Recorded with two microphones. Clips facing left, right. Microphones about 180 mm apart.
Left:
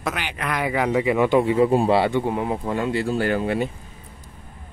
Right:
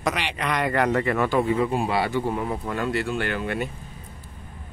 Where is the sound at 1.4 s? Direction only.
30° left (ahead or behind).